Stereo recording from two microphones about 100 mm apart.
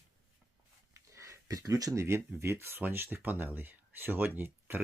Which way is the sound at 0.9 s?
30° right (ahead or behind).